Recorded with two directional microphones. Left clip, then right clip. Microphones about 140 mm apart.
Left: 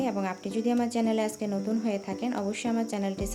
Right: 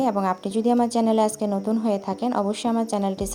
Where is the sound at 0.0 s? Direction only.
45° right (ahead or behind).